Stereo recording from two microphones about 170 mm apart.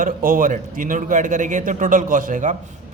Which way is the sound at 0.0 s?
55° right (ahead or behind).